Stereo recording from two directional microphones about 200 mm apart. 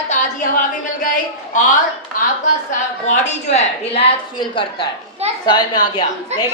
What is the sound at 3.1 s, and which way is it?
A woman's voice, 35° left (ahead or behind).